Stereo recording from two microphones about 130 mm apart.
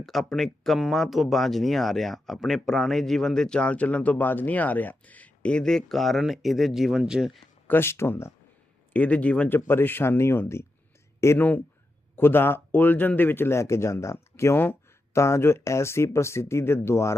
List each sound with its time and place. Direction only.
0.0 s speech: centre (ahead or behind)
7.7 s speech: 20° left (ahead or behind)